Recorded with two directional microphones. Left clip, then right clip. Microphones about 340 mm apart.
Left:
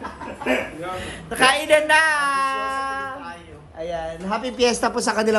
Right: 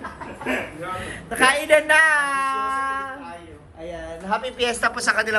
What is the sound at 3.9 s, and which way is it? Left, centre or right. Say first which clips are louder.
Speech: even; left.